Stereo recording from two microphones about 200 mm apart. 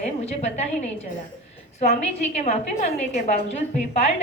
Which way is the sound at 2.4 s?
35° left (ahead or behind).